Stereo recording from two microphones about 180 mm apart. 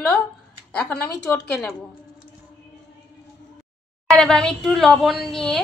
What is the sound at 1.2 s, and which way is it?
Speech, 5° left (ahead or behind).